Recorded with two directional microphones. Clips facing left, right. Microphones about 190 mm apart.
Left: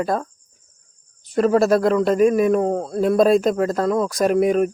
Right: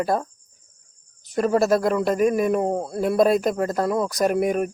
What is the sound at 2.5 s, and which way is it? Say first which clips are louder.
Speech: left 3 dB; 10° right (ahead or behind).